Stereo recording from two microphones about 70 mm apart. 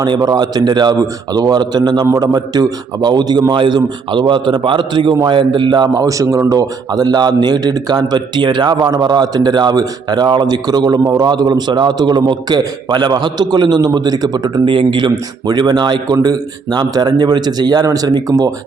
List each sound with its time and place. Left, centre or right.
0.0 s a man's voice: right
2.2 s a man's voice: right